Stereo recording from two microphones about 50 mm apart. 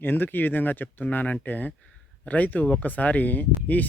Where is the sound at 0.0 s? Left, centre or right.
Left.